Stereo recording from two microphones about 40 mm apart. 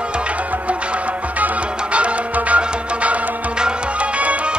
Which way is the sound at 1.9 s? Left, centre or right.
Right.